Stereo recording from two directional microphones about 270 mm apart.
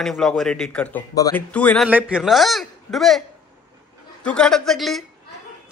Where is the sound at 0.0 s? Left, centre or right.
Centre.